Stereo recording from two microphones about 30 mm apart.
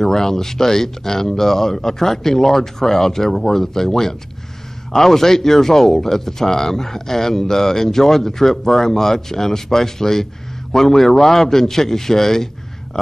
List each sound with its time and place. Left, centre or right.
0.0 s speech: centre